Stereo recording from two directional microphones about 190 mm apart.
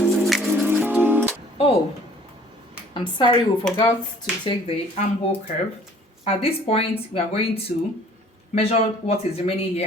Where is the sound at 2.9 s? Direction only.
25° left (ahead or behind).